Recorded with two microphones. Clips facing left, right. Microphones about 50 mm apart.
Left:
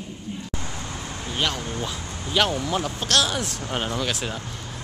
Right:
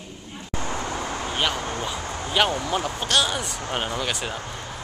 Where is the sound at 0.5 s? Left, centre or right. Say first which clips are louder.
Right 5 dB; right.